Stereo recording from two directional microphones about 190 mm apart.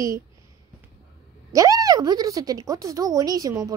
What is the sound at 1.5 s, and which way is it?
A child's voice, 20° right (ahead or behind).